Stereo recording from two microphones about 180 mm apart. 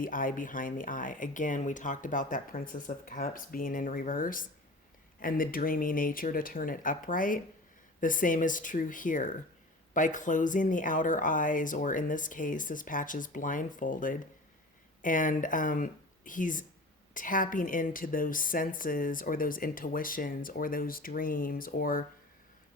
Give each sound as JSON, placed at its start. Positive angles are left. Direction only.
{"t": 0.0, "sound": "a woman's voice", "side_deg": 50}